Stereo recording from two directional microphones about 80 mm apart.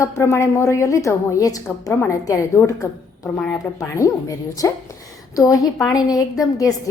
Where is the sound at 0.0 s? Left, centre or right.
Left.